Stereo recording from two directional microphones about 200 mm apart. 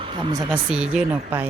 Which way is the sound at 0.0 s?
25° right (ahead or behind).